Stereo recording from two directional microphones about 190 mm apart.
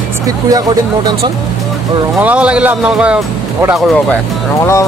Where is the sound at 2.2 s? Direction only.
5° right (ahead or behind).